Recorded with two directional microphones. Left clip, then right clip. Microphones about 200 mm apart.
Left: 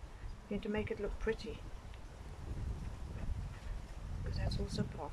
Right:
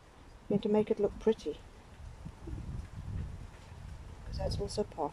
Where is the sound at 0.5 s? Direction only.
30° right (ahead or behind).